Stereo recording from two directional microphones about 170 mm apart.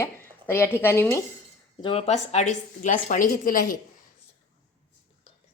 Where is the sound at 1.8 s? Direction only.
35° left (ahead or behind); by 3.8 s 55° left (ahead or behind).